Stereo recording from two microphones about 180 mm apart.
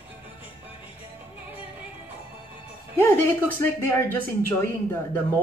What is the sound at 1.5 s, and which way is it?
Music, 10° right (ahead or behind).